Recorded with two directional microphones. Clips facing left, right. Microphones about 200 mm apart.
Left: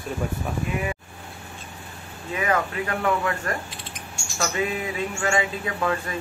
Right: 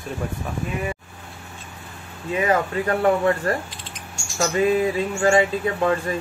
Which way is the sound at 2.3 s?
30° right (ahead or behind).